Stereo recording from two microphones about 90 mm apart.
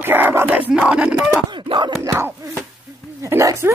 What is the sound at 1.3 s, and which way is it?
Speech, 60° right (ahead or behind).